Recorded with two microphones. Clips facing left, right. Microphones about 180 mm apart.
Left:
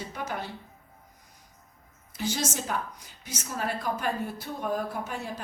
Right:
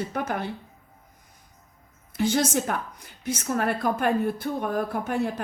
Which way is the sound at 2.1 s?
55° right (ahead or behind).